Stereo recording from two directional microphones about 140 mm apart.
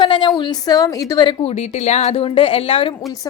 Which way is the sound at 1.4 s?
50° left (ahead or behind).